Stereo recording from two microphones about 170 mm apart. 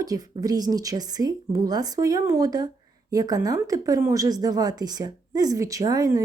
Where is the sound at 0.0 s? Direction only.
20° right (ahead or behind).